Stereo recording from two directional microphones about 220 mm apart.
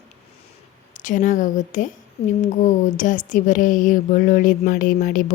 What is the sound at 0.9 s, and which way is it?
Speech, 35° left (ahead or behind).